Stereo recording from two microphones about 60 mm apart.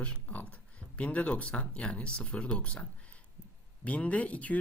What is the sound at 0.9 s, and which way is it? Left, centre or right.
Speech, left.